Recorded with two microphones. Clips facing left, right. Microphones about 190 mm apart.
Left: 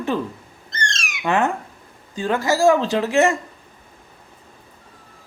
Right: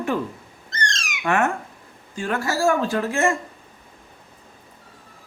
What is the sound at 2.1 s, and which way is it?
Speech, 20° left (ahead or behind).